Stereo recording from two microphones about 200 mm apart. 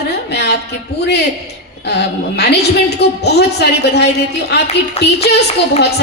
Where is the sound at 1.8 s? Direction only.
55° left (ahead or behind).